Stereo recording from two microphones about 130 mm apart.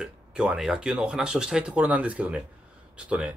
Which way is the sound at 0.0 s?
5° right (ahead or behind).